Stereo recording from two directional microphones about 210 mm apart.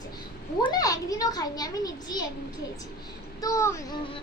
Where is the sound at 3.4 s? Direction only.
15° left (ahead or behind).